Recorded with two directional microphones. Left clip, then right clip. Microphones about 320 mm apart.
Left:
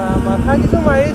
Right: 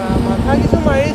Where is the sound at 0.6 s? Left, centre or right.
Right.